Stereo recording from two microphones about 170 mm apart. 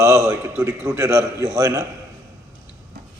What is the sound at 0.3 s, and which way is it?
A man's voice, 15° right (ahead or behind).